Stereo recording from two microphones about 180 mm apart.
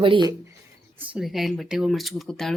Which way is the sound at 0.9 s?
10° right (ahead or behind).